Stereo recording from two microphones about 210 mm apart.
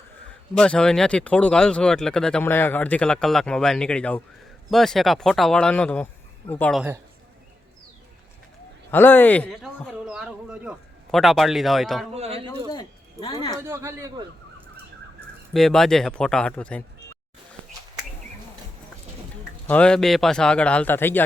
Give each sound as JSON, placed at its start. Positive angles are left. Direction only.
{"t": 0.5, "sound": "speech", "side_deg": 5}
{"t": 8.9, "sound": "speech", "side_deg": 10}
{"t": 12.1, "sound": "speech", "side_deg": -30}
{"t": 12.7, "sound": "a sound", "side_deg": 25}
{"t": 13.6, "sound": "speech", "side_deg": -15}
{"t": 15.5, "sound": "speech", "side_deg": 0}
{"t": 19.6, "sound": "speech", "side_deg": 5}